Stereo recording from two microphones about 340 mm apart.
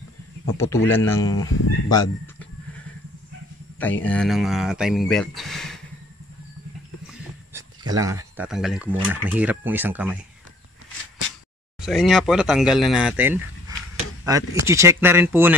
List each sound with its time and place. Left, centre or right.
0.8 s speech: centre
1.5 s speech: left
3.8 s speech: centre
7.9 s speech: centre
11.8 s speech: centre